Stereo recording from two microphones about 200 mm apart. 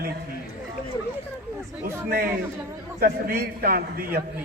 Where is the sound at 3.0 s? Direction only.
50° right (ahead or behind).